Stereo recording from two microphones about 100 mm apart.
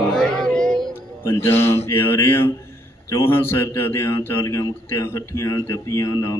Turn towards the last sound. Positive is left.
turn(degrees=35)  # may be behind; listen again after turning